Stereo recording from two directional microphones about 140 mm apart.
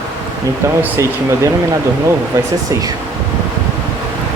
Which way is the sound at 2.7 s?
25° right (ahead or behind).